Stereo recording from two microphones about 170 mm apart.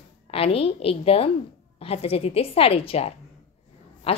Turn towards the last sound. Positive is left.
turn(degrees=35)  # may be behind; listen again after turning